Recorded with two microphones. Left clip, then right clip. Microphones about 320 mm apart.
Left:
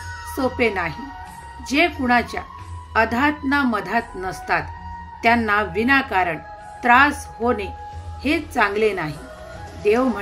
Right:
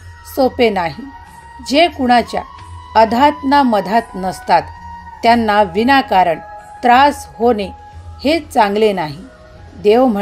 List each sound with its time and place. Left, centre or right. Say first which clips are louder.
0.3 s a woman's voice: right 8 dB; right